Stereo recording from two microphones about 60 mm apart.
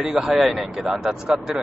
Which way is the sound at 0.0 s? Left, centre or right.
Centre.